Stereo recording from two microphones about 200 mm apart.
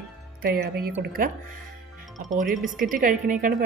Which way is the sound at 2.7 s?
45° right (ahead or behind).